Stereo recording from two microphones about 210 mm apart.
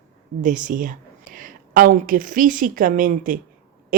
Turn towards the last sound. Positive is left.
turn(degrees=-40)  # may be behind; listen again after turning